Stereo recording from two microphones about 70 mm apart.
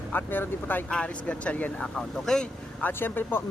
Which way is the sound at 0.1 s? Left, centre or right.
Left.